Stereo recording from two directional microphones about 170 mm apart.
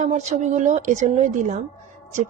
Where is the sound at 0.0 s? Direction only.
45° right (ahead or behind).